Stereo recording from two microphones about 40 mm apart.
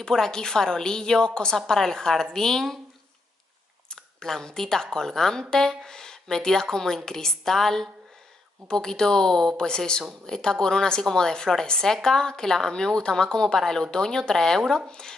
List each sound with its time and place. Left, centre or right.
0.0 s a woman's voice: centre
3.9 s a woman's voice: centre